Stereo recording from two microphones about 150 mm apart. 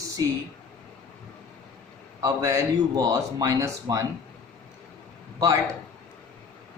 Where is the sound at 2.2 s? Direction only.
25° right (ahead or behind).